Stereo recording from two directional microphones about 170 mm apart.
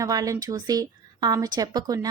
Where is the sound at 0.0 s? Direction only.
20° right (ahead or behind).